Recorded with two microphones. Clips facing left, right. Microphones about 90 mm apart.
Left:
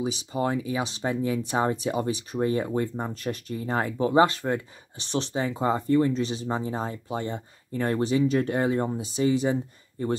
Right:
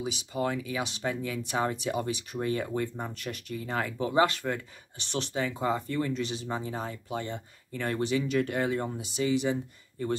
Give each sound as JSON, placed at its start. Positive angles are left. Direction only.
{"t": 0.0, "sound": "speech", "side_deg": 30}